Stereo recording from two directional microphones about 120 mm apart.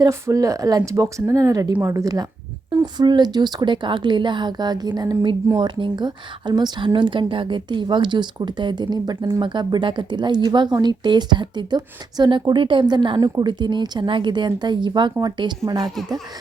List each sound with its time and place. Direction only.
0.0 s speech: 25° right (ahead or behind)